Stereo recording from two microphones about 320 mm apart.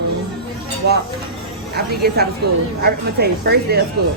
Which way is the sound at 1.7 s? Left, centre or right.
Right.